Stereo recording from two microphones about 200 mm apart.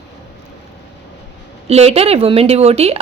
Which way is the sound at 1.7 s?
30° right (ahead or behind).